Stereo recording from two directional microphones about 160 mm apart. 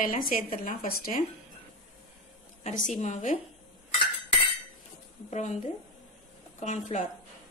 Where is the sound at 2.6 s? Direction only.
50° left (ahead or behind).